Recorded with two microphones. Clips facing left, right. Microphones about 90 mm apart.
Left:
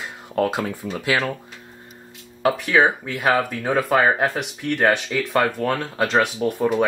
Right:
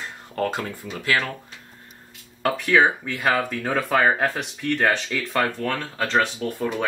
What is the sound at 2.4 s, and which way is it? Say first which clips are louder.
Speech: left 1 dB; 5° left (ahead or behind).